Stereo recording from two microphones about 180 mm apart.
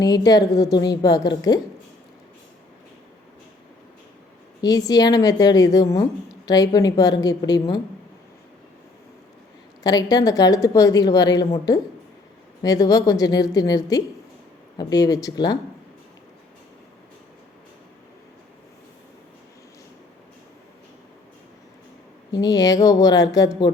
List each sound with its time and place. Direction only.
0.0 s a woman's voice: 20° left (ahead or behind)
4.6 s a woman's voice: 20° left (ahead or behind)
9.8 s a woman's voice: 20° left (ahead or behind)
22.3 s a woman's voice: 20° left (ahead or behind)